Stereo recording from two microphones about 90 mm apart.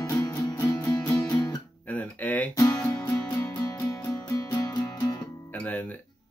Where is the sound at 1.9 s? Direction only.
20° left (ahead or behind).